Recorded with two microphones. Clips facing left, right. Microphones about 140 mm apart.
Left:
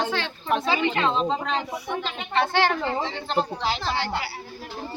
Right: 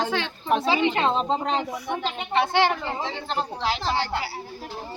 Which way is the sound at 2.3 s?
15° right (ahead or behind).